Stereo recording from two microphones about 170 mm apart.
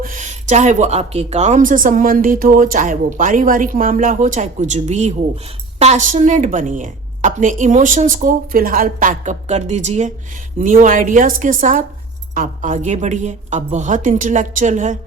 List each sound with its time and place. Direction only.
0.0 s speech: 50° right (ahead or behind)